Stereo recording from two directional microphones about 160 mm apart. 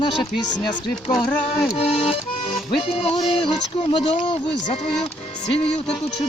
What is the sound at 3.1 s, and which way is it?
Speech, 30° left (ahead or behind).